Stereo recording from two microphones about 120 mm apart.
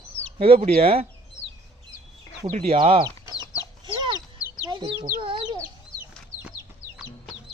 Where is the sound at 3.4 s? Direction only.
30° left (ahead or behind).